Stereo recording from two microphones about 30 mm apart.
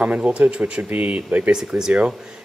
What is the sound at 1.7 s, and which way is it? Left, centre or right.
Speech, right.